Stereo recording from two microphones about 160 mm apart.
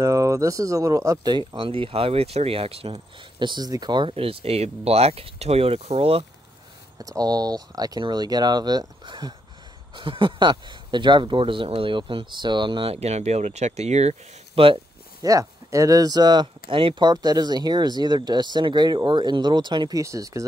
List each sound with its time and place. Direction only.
0.0 s speech: 20° right (ahead or behind)
1.5 s speech: 35° right (ahead or behind)
7.0 s speech: 25° right (ahead or behind)
15.2 s speech: 20° right (ahead or behind)